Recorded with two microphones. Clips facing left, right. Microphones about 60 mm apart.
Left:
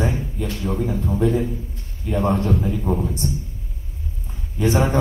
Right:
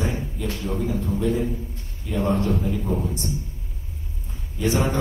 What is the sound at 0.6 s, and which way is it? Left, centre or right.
Speech, left.